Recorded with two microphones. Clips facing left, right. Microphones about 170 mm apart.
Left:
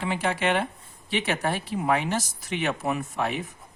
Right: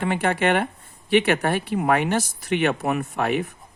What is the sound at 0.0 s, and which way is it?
Speech, 55° right (ahead or behind).